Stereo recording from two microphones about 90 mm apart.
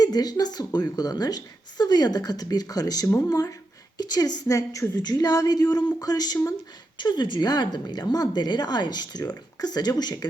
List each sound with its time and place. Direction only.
0.0 s a woman's voice: 45° left (ahead or behind)
3.9 s a woman's voice: 50° left (ahead or behind)
6.9 s a woman's voice: 55° left (ahead or behind)